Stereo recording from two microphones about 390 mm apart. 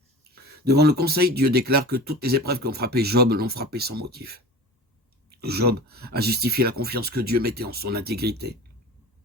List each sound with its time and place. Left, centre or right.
0.6 s speech: right